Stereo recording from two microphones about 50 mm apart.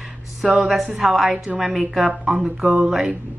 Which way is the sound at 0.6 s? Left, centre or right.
Centre.